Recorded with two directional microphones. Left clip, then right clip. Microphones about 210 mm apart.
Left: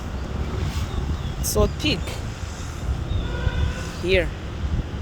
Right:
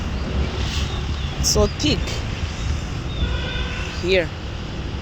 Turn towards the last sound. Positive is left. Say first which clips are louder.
# right 2 dB
turn(degrees=0)  # may be behind; listen again after turning